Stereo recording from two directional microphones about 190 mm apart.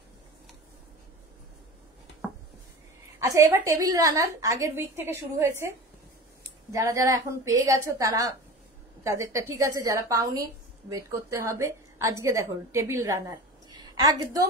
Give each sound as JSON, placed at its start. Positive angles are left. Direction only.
{"t": 3.2, "sound": "a woman's voice", "side_deg": -15}
{"t": 9.3, "sound": "a woman's voice", "side_deg": -15}
{"t": 13.3, "sound": "a sound", "side_deg": -20}